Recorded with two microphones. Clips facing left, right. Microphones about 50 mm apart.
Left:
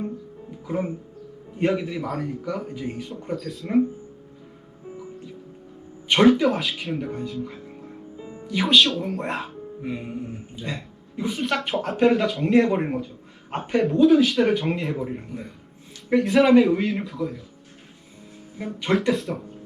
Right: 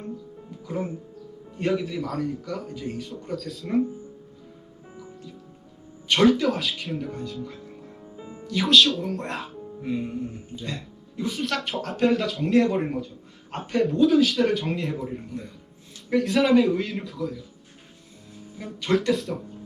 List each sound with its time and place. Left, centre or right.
0.5 s speech: centre
3.5 s a man's voice: centre
6.1 s speech: centre
6.5 s a man's voice: centre
8.8 s speech: centre
9.9 s speech: centre
11.5 s a man's voice: centre
13.0 s a sound: centre
13.6 s speech: centre
13.8 s a man's voice: centre
15.3 s a man's voice: centre
18.5 s speech: centre
19.1 s a man's voice: centre